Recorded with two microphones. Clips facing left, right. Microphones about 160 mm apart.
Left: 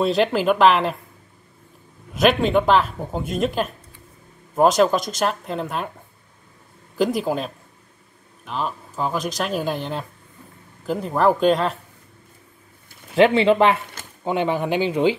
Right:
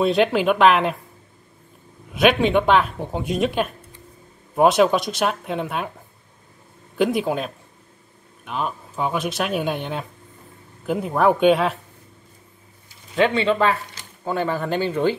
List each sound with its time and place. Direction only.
0.0 s speech: centre (ahead or behind)
2.1 s speech: centre (ahead or behind)
7.0 s speech: centre (ahead or behind)
13.1 s speech: 30° left (ahead or behind)